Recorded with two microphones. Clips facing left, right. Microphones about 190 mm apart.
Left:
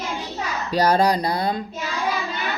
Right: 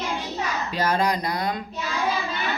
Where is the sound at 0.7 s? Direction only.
35° left (ahead or behind).